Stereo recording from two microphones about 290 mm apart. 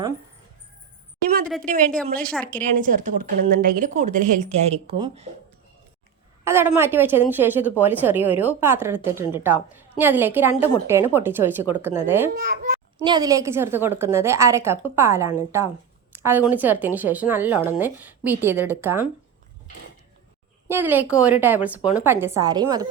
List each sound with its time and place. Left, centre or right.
1.5 s a woman's voice: centre
2.7 s a woman's voice: right
6.4 s a woman's voice: centre
12.3 s a woman's voice: right
13.1 s a woman's voice: centre
20.7 s a woman's voice: centre